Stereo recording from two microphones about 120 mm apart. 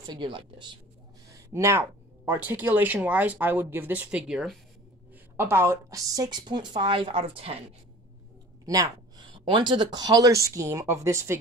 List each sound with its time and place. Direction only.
0.0 s a woman's voice: 40° right (ahead or behind)
1.3 s speech: 25° right (ahead or behind); by 4.6 s 5° right (ahead or behind)
5.4 s a woman's voice: 20° right (ahead or behind); by 7.6 s 55° right (ahead or behind)
8.6 s speech: 30° right (ahead or behind)
9.3 s speech: 40° right (ahead or behind); by 11.3 s 25° right (ahead or behind)